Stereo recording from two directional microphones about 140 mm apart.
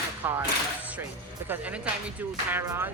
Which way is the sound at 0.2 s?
15° right (ahead or behind).